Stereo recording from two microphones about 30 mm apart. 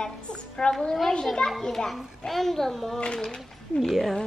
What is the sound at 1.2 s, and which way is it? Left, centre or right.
Speech, centre.